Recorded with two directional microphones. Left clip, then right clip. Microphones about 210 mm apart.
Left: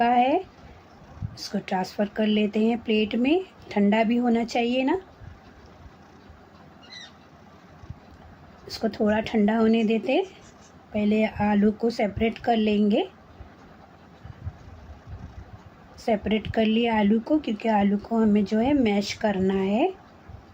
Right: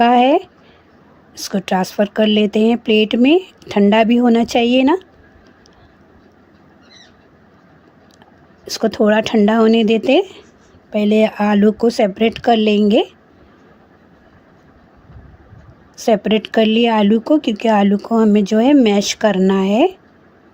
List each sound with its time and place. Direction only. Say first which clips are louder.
0.0 s speech: right 9 dB; 50° right (ahead or behind)
8.6 s speech: right 10 dB; 50° right (ahead or behind)
16.0 s speech: right 10 dB; 50° right (ahead or behind)